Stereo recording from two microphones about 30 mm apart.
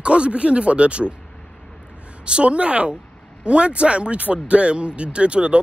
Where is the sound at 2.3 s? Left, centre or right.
Right.